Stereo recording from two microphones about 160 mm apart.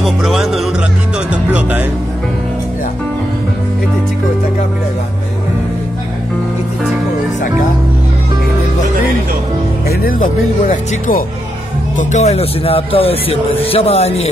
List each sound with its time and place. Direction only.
0.0 s music: centre (ahead or behind)
9.8 s speech: 65° left (ahead or behind)
12.0 s speech: 45° left (ahead or behind)